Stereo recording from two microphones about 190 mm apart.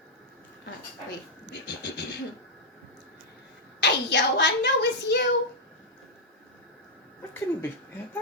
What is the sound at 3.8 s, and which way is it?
Speech, 65° left (ahead or behind).